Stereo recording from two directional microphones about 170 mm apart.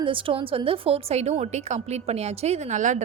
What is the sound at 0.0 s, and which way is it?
A woman's voice, 30° right (ahead or behind).